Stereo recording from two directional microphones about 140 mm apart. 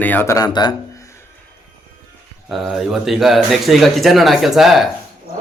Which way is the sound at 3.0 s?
Centre (ahead or behind).